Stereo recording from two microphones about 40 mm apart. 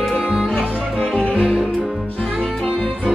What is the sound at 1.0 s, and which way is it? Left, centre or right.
Music, left.